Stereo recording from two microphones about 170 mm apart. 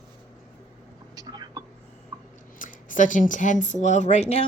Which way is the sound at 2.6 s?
50° left (ahead or behind).